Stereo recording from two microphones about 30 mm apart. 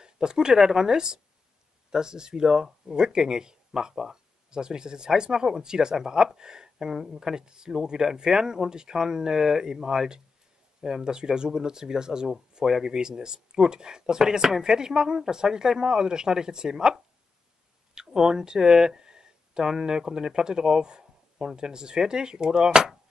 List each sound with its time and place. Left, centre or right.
0.0 s speech: right
12.6 s speech: centre
12.9 s speech: right
17.9 s a sound: right
19.8 s speech: right